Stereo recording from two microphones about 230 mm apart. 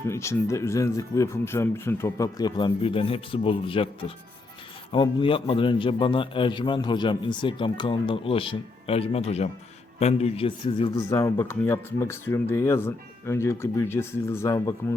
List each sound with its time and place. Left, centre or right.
0.1 s a man's voice: centre